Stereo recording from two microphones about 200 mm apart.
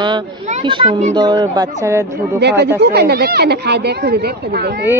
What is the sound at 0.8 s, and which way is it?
Speech, 35° right (ahead or behind).